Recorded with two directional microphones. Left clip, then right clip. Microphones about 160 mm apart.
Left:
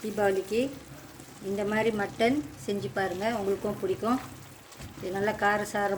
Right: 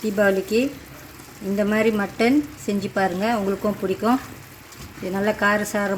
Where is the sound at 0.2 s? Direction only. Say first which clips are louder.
Right 7 dB; 60° right (ahead or behind).